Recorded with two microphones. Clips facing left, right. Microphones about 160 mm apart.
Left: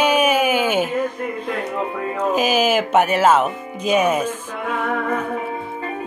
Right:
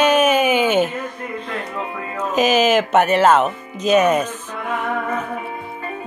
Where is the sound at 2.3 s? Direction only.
10° left (ahead or behind).